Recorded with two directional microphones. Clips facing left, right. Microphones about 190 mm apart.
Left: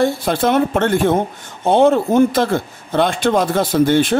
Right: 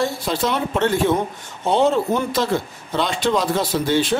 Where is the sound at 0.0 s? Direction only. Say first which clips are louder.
Left 5 dB; 55° left (ahead or behind).